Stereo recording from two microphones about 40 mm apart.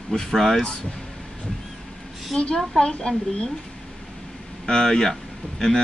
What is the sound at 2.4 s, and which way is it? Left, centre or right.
A woman's voice, left.